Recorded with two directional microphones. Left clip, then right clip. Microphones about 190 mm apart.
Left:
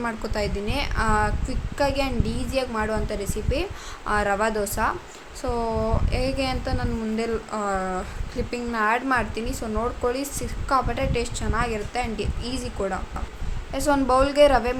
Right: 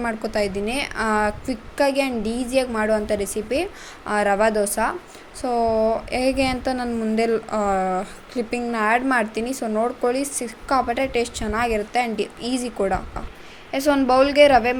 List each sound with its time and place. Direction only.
0.0 s a woman's voice: 15° right (ahead or behind)
13.7 s a woman's voice: 10° right (ahead or behind)